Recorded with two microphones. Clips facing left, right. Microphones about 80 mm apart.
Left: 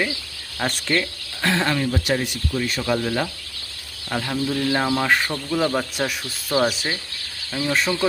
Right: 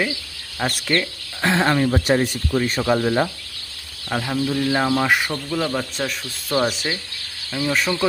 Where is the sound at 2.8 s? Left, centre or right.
Right.